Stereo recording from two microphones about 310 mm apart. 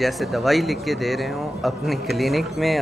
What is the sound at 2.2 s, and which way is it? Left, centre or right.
Speech, centre.